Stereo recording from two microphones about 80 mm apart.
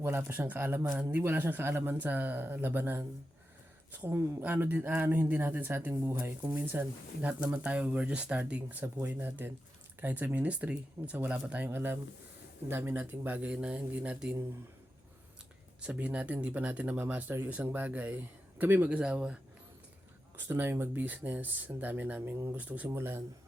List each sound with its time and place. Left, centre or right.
0.0 s speech: right
15.8 s speech: centre
18.9 s speech: centre
20.5 s speech: right
22.9 s speech: right